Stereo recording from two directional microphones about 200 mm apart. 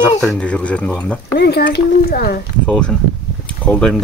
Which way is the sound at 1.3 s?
55° left (ahead or behind).